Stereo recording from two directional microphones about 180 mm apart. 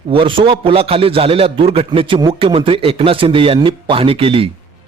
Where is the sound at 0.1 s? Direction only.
30° right (ahead or behind).